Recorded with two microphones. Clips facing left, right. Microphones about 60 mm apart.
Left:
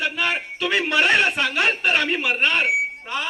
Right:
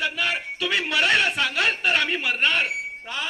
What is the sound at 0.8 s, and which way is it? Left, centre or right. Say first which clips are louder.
A man's voice: left 3 dB; left.